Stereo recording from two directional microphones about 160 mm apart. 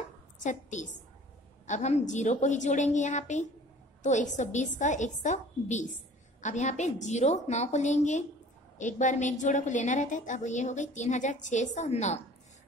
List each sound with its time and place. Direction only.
0.4 s a woman's voice: 50° left (ahead or behind)